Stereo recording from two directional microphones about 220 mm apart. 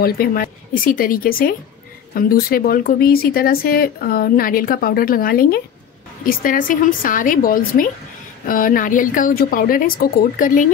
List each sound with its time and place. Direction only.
0.0 s speech: 40° left (ahead or behind)